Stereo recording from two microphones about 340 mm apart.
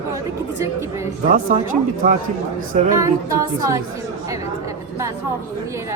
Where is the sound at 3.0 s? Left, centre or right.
Centre.